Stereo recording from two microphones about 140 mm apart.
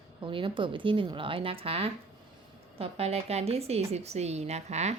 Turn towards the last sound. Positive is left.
turn(degrees=-55)  # may be behind; listen again after turning